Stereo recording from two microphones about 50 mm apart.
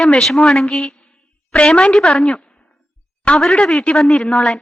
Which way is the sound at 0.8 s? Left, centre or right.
Left.